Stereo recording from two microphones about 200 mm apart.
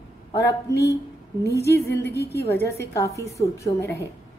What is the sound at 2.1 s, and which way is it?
Speech, 55° left (ahead or behind).